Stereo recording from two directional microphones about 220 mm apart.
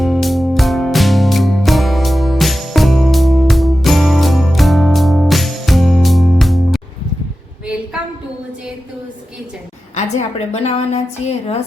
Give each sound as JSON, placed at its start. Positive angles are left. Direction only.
{"t": 0.0, "sound": "music", "side_deg": 0}
{"t": 9.9, "sound": "a woman's voice", "side_deg": 30}